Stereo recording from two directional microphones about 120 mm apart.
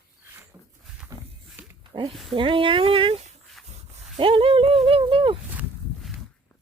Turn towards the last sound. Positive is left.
turn(degrees=-45)  # may be behind; listen again after turning